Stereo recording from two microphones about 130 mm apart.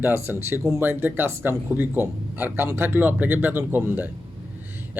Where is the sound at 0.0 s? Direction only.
15° right (ahead or behind).